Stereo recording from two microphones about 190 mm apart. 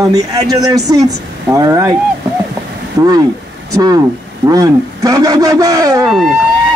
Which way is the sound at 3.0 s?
20° right (ahead or behind).